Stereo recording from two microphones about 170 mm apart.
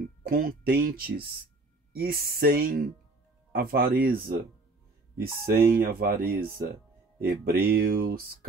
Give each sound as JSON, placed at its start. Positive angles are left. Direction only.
{"t": 0.2, "sound": "speech", "side_deg": -65}